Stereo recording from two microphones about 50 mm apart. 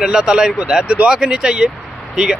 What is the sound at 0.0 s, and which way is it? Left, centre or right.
Speech, centre.